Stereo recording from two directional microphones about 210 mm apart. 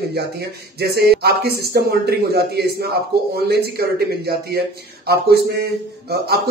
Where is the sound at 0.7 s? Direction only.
50° right (ahead or behind).